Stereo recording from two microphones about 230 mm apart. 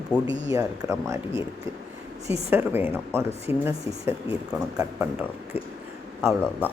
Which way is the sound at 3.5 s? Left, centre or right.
Left.